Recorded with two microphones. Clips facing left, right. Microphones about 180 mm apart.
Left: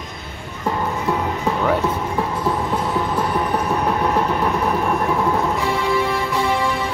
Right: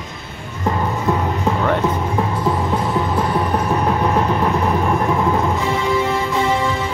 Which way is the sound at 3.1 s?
5° right (ahead or behind).